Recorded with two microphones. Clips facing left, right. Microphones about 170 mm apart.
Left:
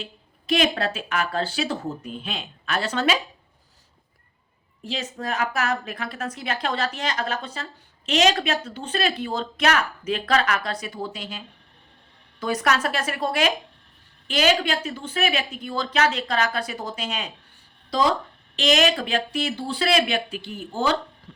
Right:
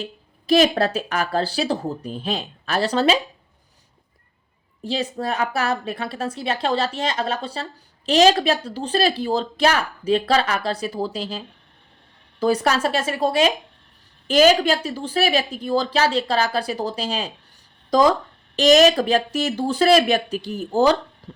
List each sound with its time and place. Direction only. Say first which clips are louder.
0.0 s a woman's voice: right 5 dB; 40° right (ahead or behind)
4.8 s a woman's voice: right 6 dB; 35° right (ahead or behind)
14.3 s a woman's voice: right 6 dB; 40° right (ahead or behind)
18.5 s a woman's voice: right 7 dB; 40° right (ahead or behind)